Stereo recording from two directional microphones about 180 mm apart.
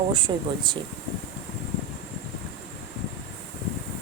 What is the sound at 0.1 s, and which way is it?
Speech, 25° right (ahead or behind).